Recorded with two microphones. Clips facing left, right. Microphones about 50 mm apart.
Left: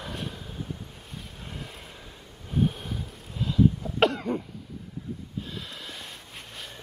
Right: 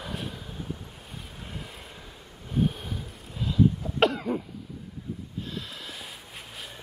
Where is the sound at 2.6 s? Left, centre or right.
Centre.